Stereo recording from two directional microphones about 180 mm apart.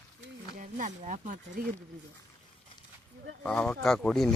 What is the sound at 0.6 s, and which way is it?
Speech, 45° right (ahead or behind).